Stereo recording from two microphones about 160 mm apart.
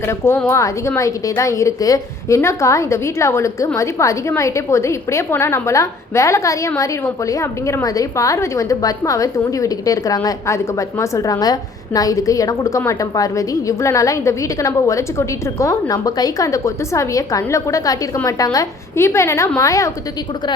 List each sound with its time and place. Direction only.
0.1 s a woman's voice: 15° left (ahead or behind)